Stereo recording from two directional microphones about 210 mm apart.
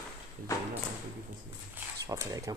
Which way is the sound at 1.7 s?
15° right (ahead or behind).